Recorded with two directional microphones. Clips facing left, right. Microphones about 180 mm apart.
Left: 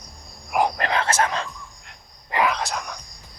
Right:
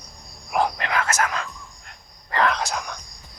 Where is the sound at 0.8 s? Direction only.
30° left (ahead or behind).